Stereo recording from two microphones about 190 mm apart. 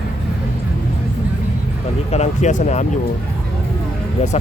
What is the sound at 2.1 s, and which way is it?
Speech, 35° left (ahead or behind).